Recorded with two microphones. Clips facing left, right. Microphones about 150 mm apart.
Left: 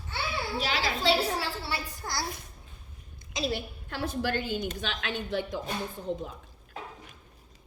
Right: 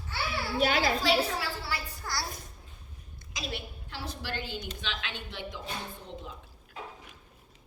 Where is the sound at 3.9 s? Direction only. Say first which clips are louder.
Left 8 dB; 50° left (ahead or behind).